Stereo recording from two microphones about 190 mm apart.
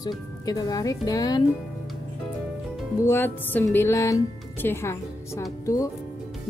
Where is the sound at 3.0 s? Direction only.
10° left (ahead or behind).